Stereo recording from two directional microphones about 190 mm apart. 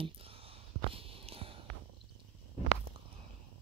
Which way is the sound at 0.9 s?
30° right (ahead or behind).